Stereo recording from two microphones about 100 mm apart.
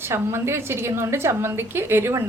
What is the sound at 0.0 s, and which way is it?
A woman's voice, 25° right (ahead or behind).